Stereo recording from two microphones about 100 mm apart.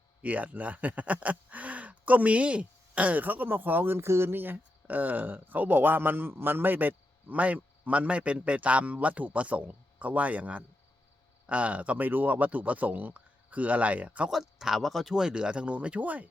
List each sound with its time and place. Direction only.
0.2 s speech: 15° right (ahead or behind)
14.3 s speech: 5° right (ahead or behind)